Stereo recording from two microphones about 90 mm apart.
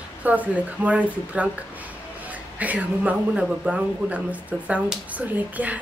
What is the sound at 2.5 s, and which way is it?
Speech, 15° right (ahead or behind).